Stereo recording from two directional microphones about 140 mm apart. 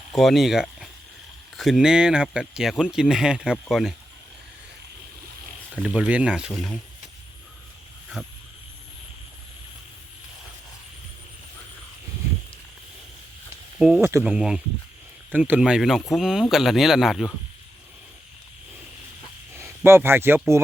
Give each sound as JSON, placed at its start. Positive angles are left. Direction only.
{"t": 0.1, "sound": "speech", "side_deg": 0}
{"t": 5.7, "sound": "speech", "side_deg": -5}
{"t": 6.5, "sound": "speech", "side_deg": 5}
{"t": 8.2, "sound": "speech", "side_deg": -5}
{"t": 13.7, "sound": "speech", "side_deg": -5}
{"t": 14.1, "sound": "speech", "side_deg": -20}
{"t": 14.3, "sound": "speech", "side_deg": -5}
{"t": 19.5, "sound": "speech", "side_deg": -15}